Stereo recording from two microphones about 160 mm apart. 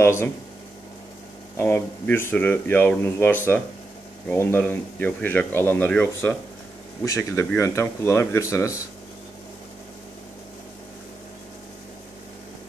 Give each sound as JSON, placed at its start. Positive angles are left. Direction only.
{"t": 0.0, "sound": "speech", "side_deg": 15}
{"t": 1.6, "sound": "speech", "side_deg": 10}